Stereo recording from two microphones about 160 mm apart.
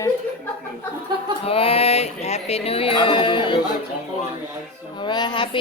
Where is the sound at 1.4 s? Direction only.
35° left (ahead or behind).